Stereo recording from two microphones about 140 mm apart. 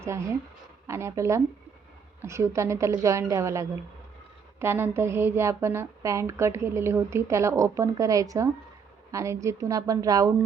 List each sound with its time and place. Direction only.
0.0 s a woman's voice: 20° right (ahead or behind)